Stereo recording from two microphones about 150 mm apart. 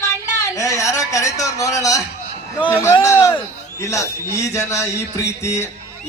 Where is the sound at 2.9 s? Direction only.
20° left (ahead or behind).